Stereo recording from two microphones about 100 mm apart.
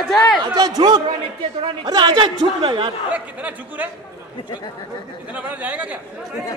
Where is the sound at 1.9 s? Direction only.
50° right (ahead or behind).